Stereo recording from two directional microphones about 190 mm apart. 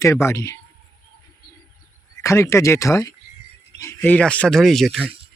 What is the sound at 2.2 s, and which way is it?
Speech, 15° left (ahead or behind).